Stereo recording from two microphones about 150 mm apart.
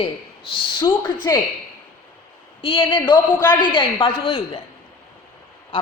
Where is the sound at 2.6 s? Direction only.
35° left (ahead or behind).